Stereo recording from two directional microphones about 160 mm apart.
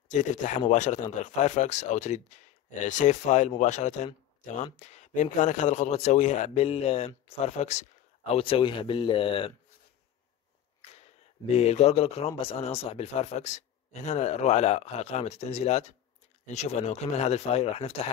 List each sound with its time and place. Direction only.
0.1 s speech: 50° left (ahead or behind); by 9.5 s 35° left (ahead or behind)
11.5 s speech: 40° left (ahead or behind)